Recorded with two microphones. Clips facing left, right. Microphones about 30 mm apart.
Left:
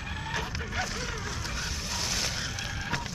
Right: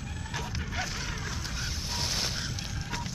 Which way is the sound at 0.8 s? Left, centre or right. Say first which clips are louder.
Left 2 dB; centre.